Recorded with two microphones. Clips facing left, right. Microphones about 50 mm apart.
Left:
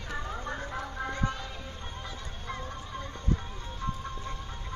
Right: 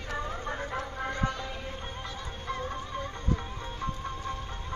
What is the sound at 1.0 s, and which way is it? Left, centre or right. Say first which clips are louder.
Clip-clop: right 1 dB; right.